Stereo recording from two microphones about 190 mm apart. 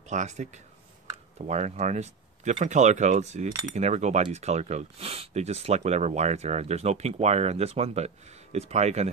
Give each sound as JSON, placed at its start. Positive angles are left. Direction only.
{"t": 0.1, "sound": "speech", "side_deg": -40}